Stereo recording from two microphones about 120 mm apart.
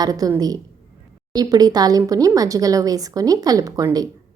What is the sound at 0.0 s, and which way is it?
A woman's voice, 30° right (ahead or behind).